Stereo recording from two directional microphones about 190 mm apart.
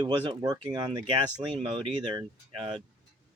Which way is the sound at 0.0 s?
20° right (ahead or behind).